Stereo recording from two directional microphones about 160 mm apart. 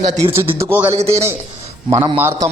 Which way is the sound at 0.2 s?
15° right (ahead or behind).